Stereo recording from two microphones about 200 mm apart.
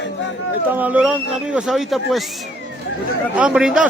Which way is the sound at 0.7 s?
10° right (ahead or behind).